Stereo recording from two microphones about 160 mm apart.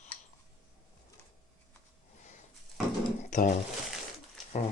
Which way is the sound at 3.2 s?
50° left (ahead or behind).